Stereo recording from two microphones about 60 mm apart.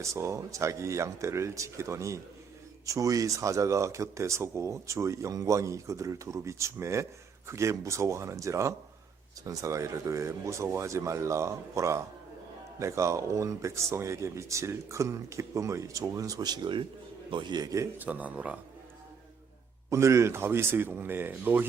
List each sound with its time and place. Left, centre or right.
0.0 s speech: right
17.6 s speech: right
17.9 s speech: right
19.9 s speech: right